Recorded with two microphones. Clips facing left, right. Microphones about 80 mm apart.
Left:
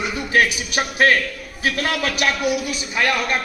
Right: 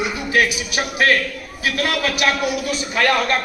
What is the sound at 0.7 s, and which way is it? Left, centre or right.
A man's voice, left.